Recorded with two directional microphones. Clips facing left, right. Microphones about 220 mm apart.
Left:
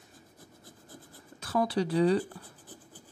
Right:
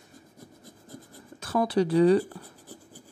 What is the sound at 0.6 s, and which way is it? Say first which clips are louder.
Rub: right 4 dB; 15° right (ahead or behind).